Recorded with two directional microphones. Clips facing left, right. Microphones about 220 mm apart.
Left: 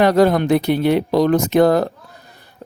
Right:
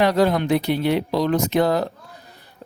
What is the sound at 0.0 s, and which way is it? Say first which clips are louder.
Speech: left 4 dB; 50° left (ahead or behind).